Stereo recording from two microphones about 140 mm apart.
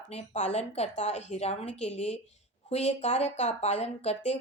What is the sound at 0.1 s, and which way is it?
Speech, 55° left (ahead or behind).